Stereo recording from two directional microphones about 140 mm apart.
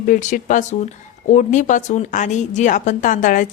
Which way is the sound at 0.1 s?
65° left (ahead or behind).